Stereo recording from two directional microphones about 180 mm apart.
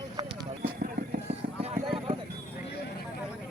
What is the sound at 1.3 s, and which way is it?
Clip-clop, 30° right (ahead or behind).